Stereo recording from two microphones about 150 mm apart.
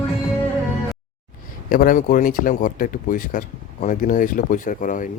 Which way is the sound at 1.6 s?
70° left (ahead or behind).